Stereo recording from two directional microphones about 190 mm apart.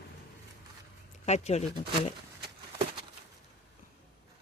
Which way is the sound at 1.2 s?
35° left (ahead or behind).